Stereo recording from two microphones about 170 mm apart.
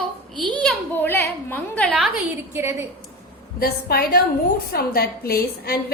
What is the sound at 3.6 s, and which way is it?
A woman's voice, 65° left (ahead or behind).